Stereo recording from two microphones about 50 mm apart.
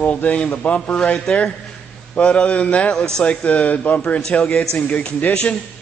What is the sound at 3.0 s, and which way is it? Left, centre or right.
Speech, centre.